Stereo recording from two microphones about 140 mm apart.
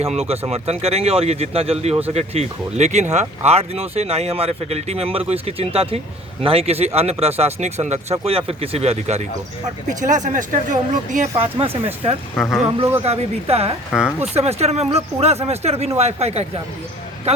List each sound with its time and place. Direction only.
0.0 s speech: 45° right (ahead or behind)
10.0 s speech: 65° right (ahead or behind)
11.5 s speech: 40° right (ahead or behind)
12.4 s speech: centre (ahead or behind)
13.0 s speech: 45° right (ahead or behind)